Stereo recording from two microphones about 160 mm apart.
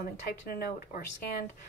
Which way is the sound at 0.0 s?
70° left (ahead or behind).